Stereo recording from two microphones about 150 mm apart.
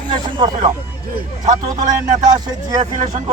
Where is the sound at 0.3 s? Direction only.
35° right (ahead or behind).